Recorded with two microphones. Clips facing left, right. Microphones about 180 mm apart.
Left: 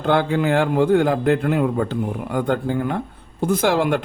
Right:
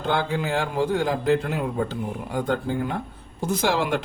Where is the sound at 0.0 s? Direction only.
60° left (ahead or behind).